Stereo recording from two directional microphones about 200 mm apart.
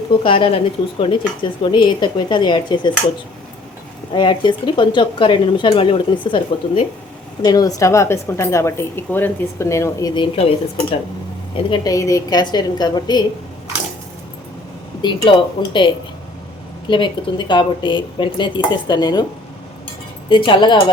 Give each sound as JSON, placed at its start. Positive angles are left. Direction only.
{"t": 0.2, "sound": "speech", "side_deg": 25}
{"t": 4.1, "sound": "a woman's voice", "side_deg": 25}
{"t": 11.5, "sound": "speech", "side_deg": 20}
{"t": 15.0, "sound": "speech", "side_deg": 25}
{"t": 20.3, "sound": "speech", "side_deg": 25}